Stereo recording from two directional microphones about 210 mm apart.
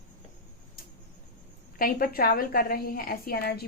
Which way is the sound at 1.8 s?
45° left (ahead or behind).